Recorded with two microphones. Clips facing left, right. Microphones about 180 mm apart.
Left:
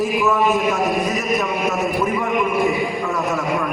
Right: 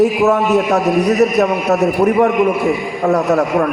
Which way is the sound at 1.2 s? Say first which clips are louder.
Right 8 dB; 70° right (ahead or behind).